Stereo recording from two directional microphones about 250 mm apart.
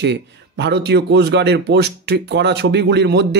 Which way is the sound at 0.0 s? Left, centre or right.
Right.